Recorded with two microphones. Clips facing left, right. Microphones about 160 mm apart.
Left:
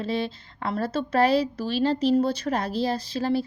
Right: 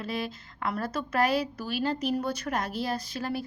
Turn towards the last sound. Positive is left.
turn(degrees=30)  # may be behind; listen again after turning